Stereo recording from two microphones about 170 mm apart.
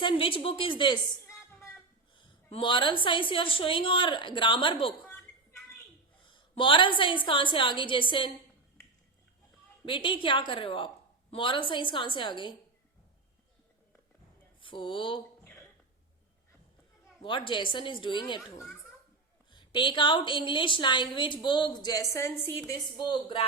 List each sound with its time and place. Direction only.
0.0 s a woman's voice: 30° left (ahead or behind)
2.1 s a woman's voice: 30° left (ahead or behind)
6.3 s a woman's voice: 30° left (ahead or behind)
9.8 s a woman's voice: 30° left (ahead or behind)
14.6 s speech: 30° left (ahead or behind)
17.2 s a woman's voice: 30° left (ahead or behind)